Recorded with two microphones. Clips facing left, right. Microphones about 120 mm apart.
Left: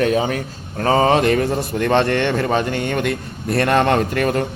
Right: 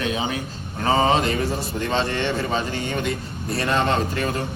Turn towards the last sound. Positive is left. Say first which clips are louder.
# left 6 dB
turn(degrees=60)  # may be behind; listen again after turning